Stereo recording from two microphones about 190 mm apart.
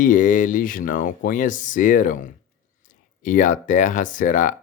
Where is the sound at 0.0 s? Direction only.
45° left (ahead or behind).